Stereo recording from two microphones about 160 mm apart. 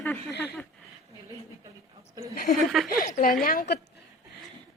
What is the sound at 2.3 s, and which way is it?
Speech, 65° left (ahead or behind).